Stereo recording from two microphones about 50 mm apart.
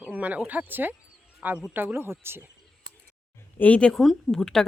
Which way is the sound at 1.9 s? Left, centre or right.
Right.